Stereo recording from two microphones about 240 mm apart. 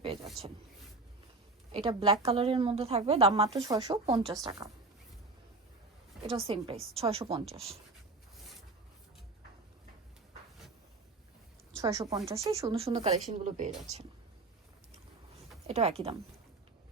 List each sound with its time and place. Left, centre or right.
1.7 s speech: right
6.2 s speech: right
11.8 s speech: centre
12.7 s speech: right
15.6 s speech: right